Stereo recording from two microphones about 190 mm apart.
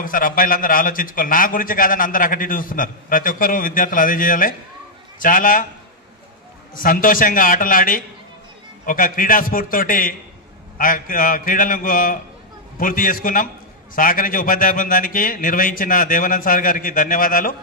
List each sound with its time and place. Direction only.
0.0 s a man's voice: 45° left (ahead or behind)
6.7 s a man's voice: 45° left (ahead or behind)